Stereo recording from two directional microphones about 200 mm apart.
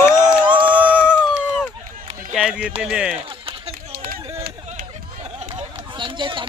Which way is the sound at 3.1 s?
30° right (ahead or behind).